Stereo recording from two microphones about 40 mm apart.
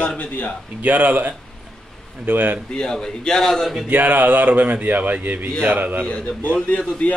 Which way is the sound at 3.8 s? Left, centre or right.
Right.